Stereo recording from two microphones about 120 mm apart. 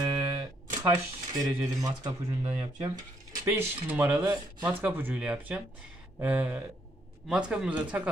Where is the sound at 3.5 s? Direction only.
15° right (ahead or behind).